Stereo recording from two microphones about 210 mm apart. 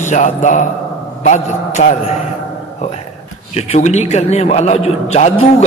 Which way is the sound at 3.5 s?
30° left (ahead or behind).